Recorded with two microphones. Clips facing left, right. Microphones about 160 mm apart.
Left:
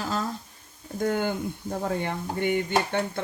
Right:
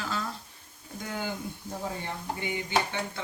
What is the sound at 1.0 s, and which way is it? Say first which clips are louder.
Speech: left 9 dB; 55° left (ahead or behind).